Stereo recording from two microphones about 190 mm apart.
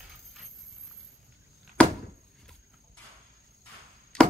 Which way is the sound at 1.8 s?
5° left (ahead or behind).